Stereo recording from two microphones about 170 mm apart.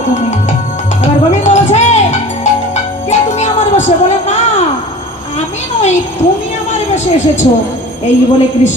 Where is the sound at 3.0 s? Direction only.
40° left (ahead or behind).